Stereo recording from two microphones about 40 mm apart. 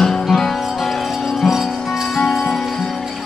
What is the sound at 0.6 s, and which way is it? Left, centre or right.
Music, centre.